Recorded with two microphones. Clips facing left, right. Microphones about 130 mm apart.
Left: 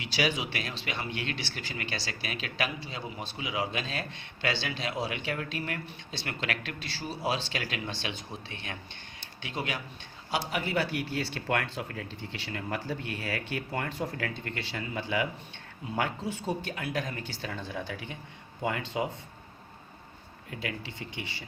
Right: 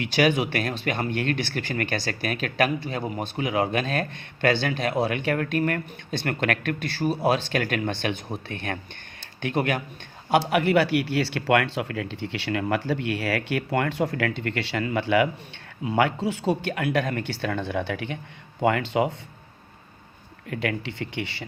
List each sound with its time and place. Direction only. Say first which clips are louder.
0.0 s speech: right 9 dB; 55° right (ahead or behind)
10.5 s speech: right 9 dB; 70° right (ahead or behind)
15.8 s speech: right 9 dB; 90° right; by 19.1 s 70° right (ahead or behind)
20.5 s speech: right 9 dB; 70° right (ahead or behind)